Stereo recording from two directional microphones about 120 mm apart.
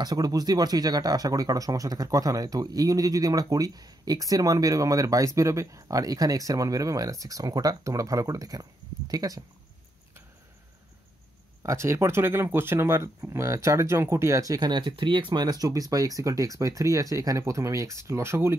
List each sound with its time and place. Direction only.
0.0 s speech: 35° right (ahead or behind)
11.6 s speech: 25° right (ahead or behind)